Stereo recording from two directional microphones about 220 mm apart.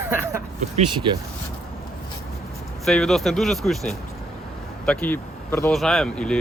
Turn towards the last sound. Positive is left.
turn(degrees=5)  # may be behind; listen again after turning